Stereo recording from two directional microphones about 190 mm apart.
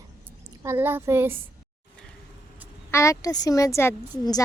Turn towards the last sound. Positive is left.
turn(degrees=15)  # may be behind; listen again after turning